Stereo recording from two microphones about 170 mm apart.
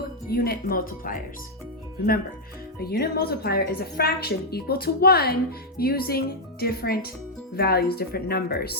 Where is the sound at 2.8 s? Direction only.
65° left (ahead or behind).